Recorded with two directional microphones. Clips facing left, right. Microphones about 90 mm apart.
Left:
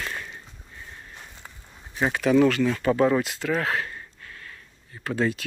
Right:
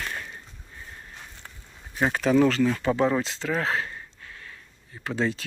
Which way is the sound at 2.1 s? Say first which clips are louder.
Left 1 dB; 35° right (ahead or behind).